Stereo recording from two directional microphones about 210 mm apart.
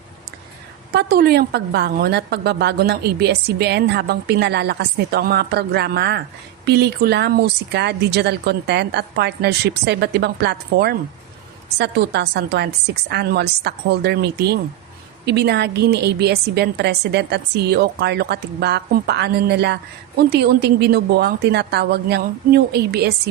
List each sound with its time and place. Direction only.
0.9 s a woman's voice: 50° right (ahead or behind)